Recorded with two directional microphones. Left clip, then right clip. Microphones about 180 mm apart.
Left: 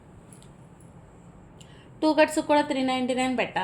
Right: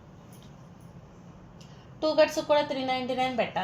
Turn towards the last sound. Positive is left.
turn(degrees=60)  # may be behind; listen again after turning